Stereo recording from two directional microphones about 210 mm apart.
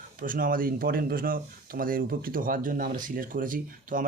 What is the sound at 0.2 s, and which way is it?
Speech, 40° right (ahead or behind).